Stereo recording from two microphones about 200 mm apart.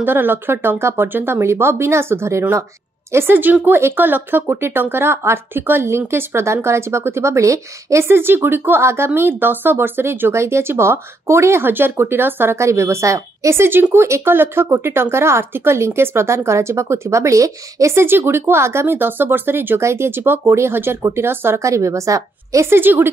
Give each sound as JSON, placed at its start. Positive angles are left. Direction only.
{"t": 0.0, "sound": "a woman's voice", "side_deg": -10}